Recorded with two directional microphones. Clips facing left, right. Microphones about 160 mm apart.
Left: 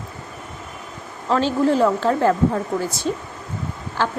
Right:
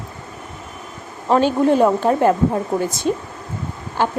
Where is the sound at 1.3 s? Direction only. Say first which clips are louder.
Right 3 dB; 15° right (ahead or behind).